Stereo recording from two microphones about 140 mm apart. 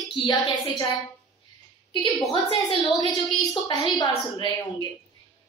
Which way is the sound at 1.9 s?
35° left (ahead or behind).